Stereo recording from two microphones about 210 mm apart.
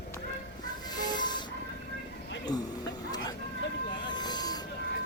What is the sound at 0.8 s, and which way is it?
Train, 20° left (ahead or behind).